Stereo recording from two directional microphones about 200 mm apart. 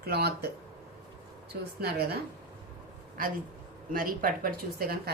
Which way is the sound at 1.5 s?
55° right (ahead or behind).